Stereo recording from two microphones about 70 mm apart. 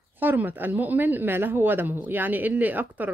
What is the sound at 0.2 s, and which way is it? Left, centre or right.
Speech, right.